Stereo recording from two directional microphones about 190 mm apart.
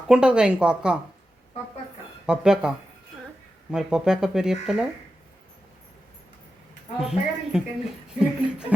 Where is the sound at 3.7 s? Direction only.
5° right (ahead or behind).